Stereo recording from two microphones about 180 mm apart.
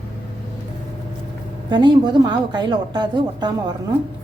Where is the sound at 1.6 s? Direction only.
25° right (ahead or behind).